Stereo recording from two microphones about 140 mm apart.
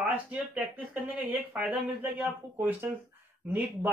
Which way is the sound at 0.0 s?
10° right (ahead or behind).